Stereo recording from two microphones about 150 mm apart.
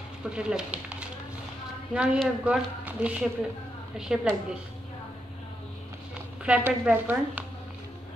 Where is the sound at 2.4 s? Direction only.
10° right (ahead or behind).